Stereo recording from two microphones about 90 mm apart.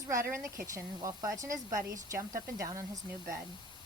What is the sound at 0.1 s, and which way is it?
Speech, 35° right (ahead or behind).